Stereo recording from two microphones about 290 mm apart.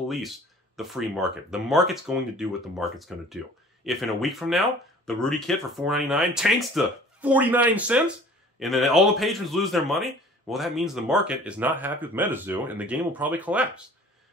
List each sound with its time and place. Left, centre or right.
0.7 s speech: centre